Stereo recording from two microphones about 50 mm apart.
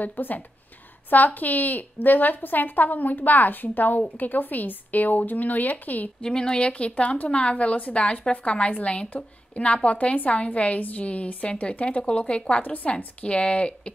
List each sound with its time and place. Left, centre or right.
0.0 s a woman's voice: left
6.2 s a woman's voice: centre
12.6 s a woman's voice: left
12.9 s a woman's voice: left